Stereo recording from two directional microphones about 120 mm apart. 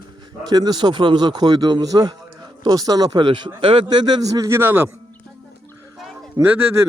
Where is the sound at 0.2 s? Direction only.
35° right (ahead or behind); by 4.9 s 20° right (ahead or behind).